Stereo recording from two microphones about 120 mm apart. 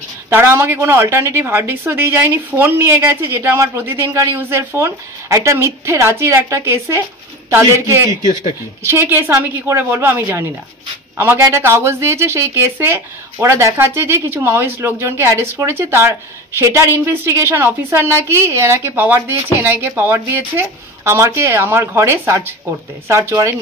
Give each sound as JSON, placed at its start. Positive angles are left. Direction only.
{"t": 0.3, "sound": "speech", "side_deg": -20}